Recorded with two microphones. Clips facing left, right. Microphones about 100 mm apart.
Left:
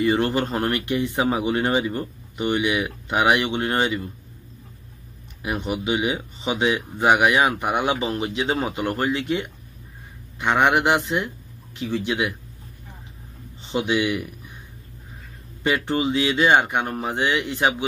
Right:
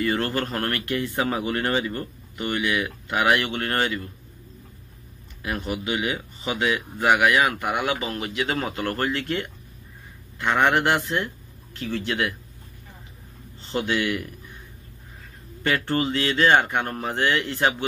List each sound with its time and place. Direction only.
0.0 s speech: 20° left (ahead or behind)
5.4 s speech: 20° left (ahead or behind)
13.6 s speech: 15° left (ahead or behind)
15.6 s speech: 15° left (ahead or behind)